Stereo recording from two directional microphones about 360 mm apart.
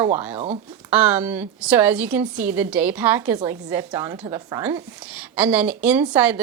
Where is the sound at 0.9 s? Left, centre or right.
Centre.